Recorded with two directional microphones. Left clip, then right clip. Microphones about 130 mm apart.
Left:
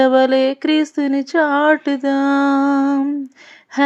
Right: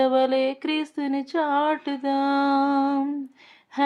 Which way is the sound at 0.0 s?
35° left (ahead or behind).